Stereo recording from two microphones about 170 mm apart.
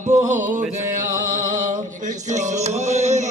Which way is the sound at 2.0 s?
45° right (ahead or behind).